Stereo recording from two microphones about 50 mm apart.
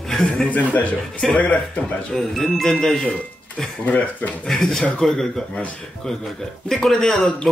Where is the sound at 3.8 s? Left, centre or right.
Left.